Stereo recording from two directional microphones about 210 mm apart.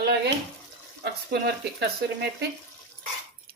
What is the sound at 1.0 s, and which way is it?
Speech, 50° right (ahead or behind).